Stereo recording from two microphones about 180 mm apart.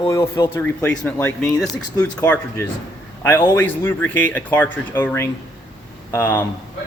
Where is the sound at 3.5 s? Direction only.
10° left (ahead or behind).